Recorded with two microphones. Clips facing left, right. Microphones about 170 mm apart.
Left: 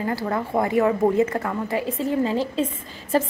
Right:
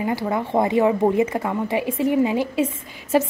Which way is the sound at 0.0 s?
15° right (ahead or behind).